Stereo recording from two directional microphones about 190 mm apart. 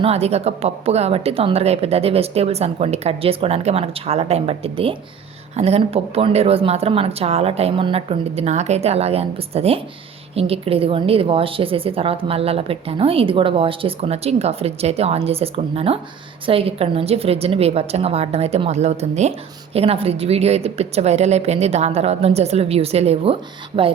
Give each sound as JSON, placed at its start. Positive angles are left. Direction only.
{"t": 0.0, "sound": "a woman's voice", "side_deg": -35}